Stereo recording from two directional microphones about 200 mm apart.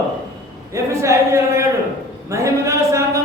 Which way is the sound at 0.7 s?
15° right (ahead or behind).